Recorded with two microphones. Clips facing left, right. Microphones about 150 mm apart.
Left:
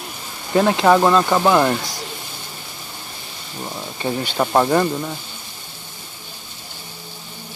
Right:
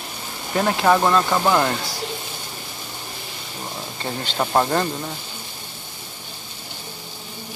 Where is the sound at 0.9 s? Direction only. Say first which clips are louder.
Left 2 dB; 15° left (ahead or behind).